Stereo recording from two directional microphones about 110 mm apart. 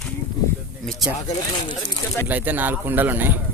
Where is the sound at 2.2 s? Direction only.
15° right (ahead or behind).